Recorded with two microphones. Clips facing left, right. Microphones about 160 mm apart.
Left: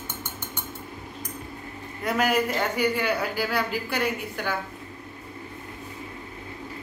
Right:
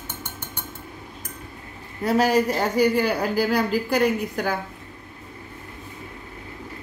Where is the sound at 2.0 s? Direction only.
35° right (ahead or behind).